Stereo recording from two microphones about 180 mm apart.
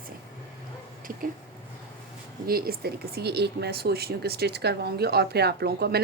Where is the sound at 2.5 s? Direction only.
55° right (ahead or behind).